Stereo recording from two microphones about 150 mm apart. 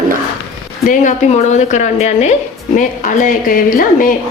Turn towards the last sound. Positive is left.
turn(degrees=70)  # may be behind; listen again after turning